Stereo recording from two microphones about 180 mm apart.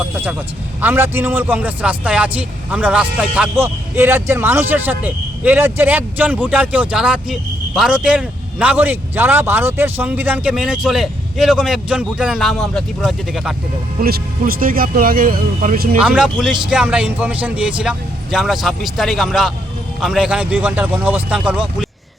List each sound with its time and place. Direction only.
0.8 s a man's voice: 10° right (ahead or behind)
14.0 s speech: 55° right (ahead or behind)
16.0 s a man's voice: 5° right (ahead or behind)